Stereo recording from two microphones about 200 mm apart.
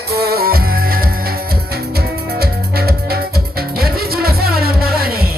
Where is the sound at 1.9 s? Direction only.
50° right (ahead or behind).